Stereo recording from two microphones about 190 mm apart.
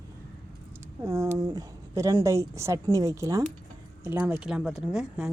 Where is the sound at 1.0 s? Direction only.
15° right (ahead or behind).